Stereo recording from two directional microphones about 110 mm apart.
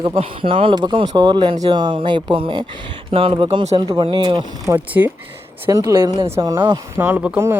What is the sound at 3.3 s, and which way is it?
Speech, 45° right (ahead or behind).